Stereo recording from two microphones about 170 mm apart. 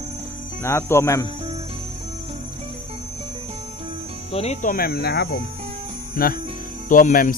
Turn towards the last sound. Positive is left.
turn(degrees=55)  # may be behind; listen again after turning